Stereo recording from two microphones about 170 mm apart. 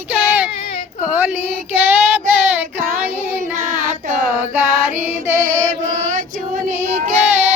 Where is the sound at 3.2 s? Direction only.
10° right (ahead or behind).